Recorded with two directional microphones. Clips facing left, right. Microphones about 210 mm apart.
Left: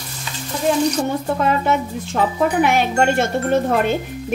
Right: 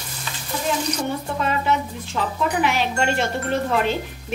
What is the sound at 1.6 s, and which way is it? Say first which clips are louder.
Speech: left 3 dB; 50° left (ahead or behind).